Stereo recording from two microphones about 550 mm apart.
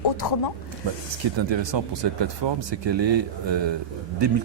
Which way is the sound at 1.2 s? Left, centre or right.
Right.